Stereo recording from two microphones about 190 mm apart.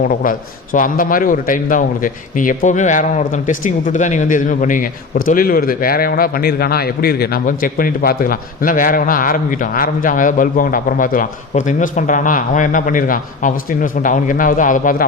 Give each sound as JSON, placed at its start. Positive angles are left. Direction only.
{"t": 0.1, "sound": "a man's voice", "side_deg": 45}